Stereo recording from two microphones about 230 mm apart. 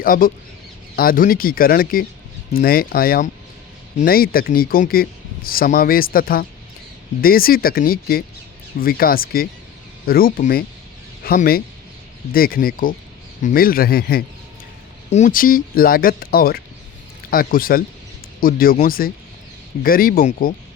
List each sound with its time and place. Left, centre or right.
0.0 s a man's voice: left